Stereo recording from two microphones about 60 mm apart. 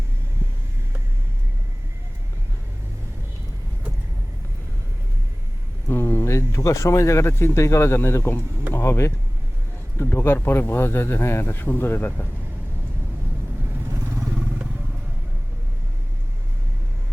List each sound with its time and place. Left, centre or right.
5.9 s a sound: left
6.2 s speech: left
14.3 s vehicle: right